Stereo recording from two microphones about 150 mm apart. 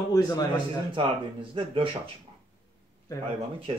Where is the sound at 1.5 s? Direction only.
35° right (ahead or behind).